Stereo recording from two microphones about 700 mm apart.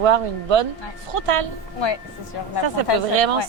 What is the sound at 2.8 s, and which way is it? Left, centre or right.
Speech, right.